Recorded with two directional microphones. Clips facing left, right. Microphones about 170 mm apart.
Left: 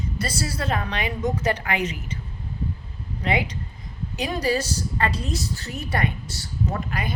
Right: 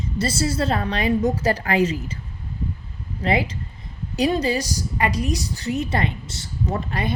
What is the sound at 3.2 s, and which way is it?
Speech, 30° right (ahead or behind).